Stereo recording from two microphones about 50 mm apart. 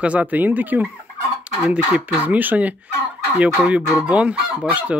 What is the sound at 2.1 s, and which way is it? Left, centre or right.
Speech, right.